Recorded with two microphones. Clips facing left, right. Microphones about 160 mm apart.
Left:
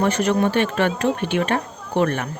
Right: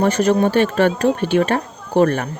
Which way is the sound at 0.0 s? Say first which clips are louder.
Right 4 dB; 40° right (ahead or behind).